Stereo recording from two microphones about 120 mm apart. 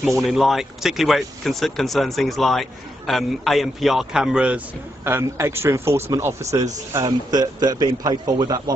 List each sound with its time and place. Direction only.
0.2 s speech: centre (ahead or behind)
5.0 s speech: 20° right (ahead or behind); by 8.7 s 35° right (ahead or behind)